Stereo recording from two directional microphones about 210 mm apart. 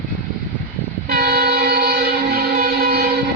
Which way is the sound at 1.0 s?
45° right (ahead or behind).